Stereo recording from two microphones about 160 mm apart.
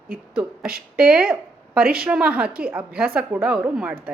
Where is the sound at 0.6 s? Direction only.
70° right (ahead or behind).